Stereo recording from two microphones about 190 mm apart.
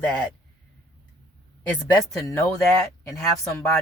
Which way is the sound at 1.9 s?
15° left (ahead or behind).